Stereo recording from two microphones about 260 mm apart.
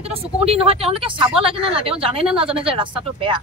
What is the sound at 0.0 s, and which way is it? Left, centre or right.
Speech, right.